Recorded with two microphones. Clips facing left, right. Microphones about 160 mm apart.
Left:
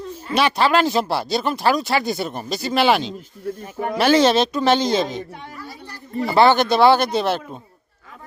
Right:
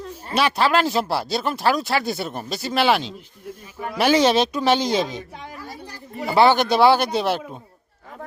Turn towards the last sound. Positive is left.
turn(degrees=-10)  # may be behind; listen again after turning